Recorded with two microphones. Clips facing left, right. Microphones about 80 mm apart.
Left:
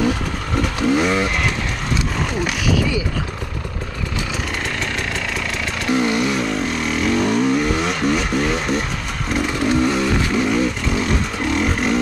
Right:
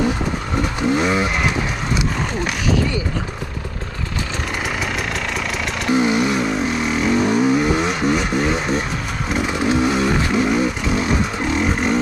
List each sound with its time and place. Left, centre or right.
0.6 s vehicle: centre
5.9 s vehicle: centre